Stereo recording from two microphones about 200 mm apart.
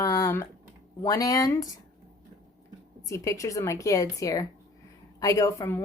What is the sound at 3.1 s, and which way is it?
Speech, 15° left (ahead or behind).